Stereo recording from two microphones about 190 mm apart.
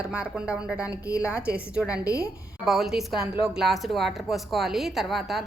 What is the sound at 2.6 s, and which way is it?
Speech, centre (ahead or behind).